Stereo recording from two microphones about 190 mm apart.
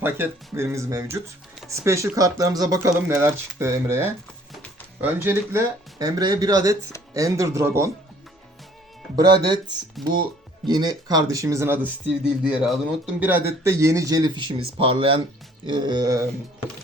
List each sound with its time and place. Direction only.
0.0 s speech: 10° right (ahead or behind)
9.1 s speech: 20° right (ahead or behind)